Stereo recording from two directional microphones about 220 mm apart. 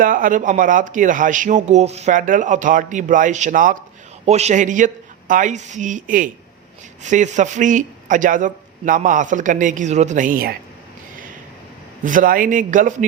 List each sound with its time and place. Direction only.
0.0 s speech: 40° right (ahead or behind)
12.0 s speech: 40° right (ahead or behind)